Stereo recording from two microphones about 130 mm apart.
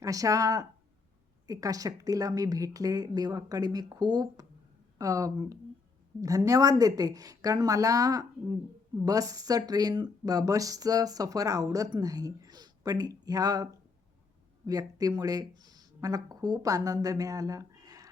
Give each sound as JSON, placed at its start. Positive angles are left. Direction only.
{"t": 0.0, "sound": "speech", "side_deg": -25}
{"t": 14.7, "sound": "speech", "side_deg": -30}